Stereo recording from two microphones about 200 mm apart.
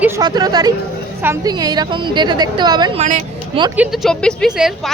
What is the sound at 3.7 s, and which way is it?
A woman's voice, centre (ahead or behind).